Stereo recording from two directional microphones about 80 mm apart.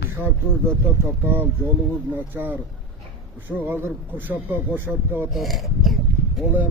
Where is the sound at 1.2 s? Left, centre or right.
Right.